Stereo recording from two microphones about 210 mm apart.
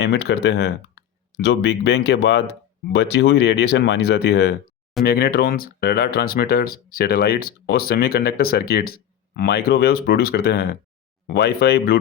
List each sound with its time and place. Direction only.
0.0 s speech: 55° left (ahead or behind)